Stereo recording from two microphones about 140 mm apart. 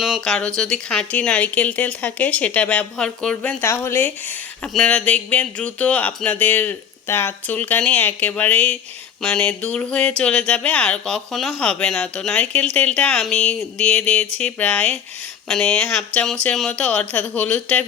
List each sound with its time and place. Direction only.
0.0 s speech: centre (ahead or behind)
3.6 s speech: 20° left (ahead or behind)